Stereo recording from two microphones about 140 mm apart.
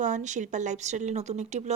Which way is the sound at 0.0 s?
60° right (ahead or behind).